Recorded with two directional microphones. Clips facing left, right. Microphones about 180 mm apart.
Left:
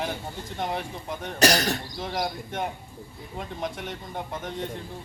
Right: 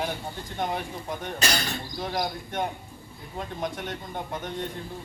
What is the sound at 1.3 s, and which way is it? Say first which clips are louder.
Speech: left 9 dB; 75° left (ahead or behind).